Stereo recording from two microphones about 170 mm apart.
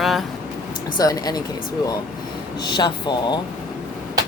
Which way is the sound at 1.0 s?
20° left (ahead or behind).